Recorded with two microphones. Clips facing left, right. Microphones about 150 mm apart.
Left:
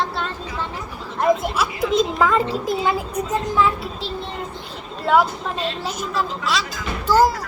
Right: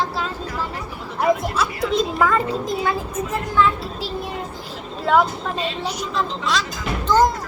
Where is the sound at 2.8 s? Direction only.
20° left (ahead or behind).